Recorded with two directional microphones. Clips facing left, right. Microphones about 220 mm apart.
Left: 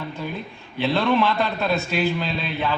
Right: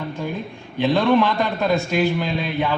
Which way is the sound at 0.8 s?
15° right (ahead or behind).